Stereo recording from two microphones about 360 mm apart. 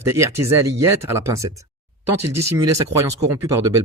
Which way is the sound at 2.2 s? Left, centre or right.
Right.